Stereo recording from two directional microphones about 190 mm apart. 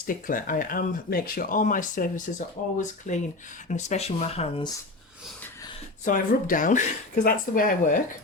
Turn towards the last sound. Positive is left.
turn(degrees=45)  # may be behind; listen again after turning